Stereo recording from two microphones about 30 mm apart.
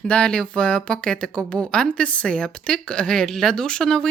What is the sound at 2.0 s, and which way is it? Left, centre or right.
Speech, left.